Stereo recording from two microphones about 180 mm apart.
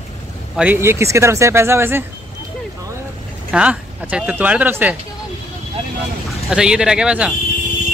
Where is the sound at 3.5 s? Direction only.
5° right (ahead or behind).